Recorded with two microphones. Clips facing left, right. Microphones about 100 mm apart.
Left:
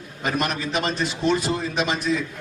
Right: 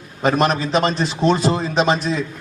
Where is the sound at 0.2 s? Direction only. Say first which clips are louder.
Right 8 dB; 35° right (ahead or behind).